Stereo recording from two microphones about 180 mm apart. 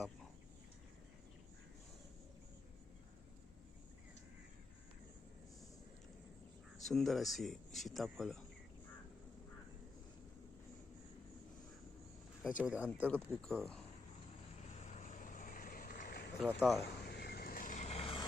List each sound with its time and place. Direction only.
6.8 s speech: centre (ahead or behind)
12.4 s speech: 5° right (ahead or behind)
12.9 s speech: 5° left (ahead or behind)
14.7 s vehicle: 40° left (ahead or behind)
16.4 s speech: centre (ahead or behind)
17.1 s vehicle: 60° left (ahead or behind); by 18.3 s 30° left (ahead or behind)